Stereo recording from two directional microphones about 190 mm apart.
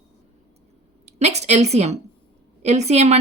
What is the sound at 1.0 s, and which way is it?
A woman's voice, 35° right (ahead or behind).